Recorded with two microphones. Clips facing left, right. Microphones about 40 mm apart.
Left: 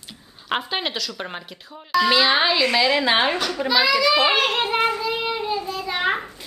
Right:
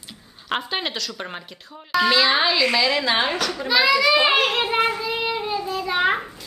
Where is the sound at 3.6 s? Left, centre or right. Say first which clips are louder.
Right 1 dB; centre.